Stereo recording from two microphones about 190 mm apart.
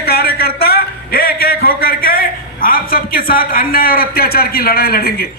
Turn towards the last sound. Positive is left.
turn(degrees=50)  # may be behind; listen again after turning